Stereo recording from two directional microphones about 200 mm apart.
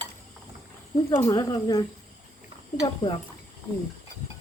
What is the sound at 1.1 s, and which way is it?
Speech, 15° left (ahead or behind).